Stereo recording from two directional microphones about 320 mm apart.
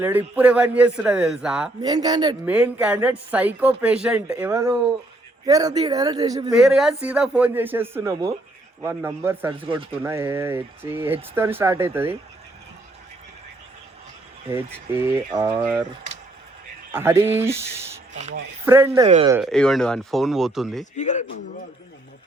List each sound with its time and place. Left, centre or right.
0.0 s a man's voice: centre
6.6 s a man's voice: centre
14.5 s a man's voice: centre
16.9 s speech: centre
18.2 s speech: right
18.6 s speech: centre
19.0 s speech: right
19.3 s a man's voice: centre
20.9 s a man's voice: left